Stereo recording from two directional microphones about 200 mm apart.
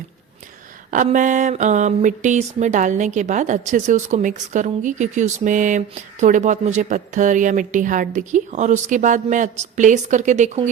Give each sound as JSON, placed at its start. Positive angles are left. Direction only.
{"t": 0.9, "sound": "speech", "side_deg": -40}